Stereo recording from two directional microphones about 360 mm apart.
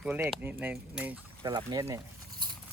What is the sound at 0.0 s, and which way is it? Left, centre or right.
Speech, centre.